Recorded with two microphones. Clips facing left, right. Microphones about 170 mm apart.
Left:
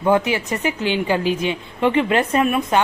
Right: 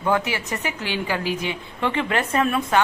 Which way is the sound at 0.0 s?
20° left (ahead or behind).